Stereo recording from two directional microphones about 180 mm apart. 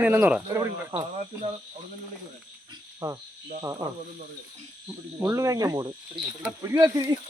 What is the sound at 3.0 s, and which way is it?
Speech, 15° right (ahead or behind).